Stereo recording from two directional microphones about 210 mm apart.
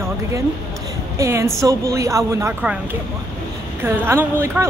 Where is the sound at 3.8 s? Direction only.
10° right (ahead or behind).